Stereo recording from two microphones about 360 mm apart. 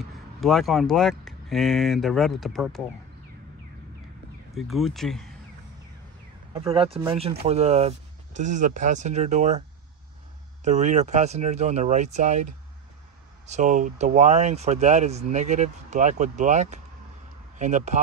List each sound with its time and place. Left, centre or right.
0.0 s speech: centre
4.6 s speech: centre
6.5 s speech: centre
10.6 s speech: centre
13.5 s speech: centre